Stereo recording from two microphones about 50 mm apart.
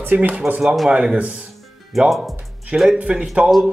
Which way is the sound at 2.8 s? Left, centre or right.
Right.